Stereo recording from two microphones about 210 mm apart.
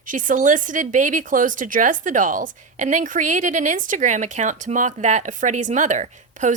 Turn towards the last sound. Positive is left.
turn(degrees=-35)  # may be behind; listen again after turning